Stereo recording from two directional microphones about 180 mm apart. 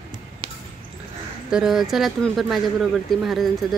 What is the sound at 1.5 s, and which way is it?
Speech, centre (ahead or behind).